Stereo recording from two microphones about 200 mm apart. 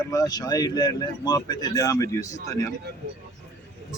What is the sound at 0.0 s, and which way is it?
Speech, 20° left (ahead or behind).